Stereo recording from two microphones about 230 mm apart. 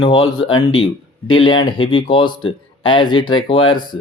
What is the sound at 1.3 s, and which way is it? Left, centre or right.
Speech, centre.